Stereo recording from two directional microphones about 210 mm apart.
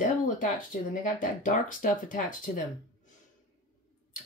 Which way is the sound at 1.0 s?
40° left (ahead or behind).